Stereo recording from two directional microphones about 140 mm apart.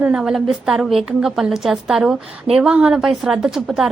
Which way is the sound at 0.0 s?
5° right (ahead or behind).